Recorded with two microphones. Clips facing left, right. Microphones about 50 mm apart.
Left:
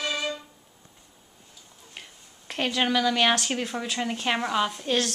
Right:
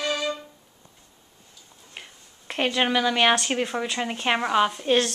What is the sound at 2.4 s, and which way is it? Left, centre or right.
A woman's voice, centre.